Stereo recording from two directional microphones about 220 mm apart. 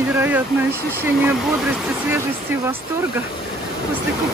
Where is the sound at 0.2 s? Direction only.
10° right (ahead or behind).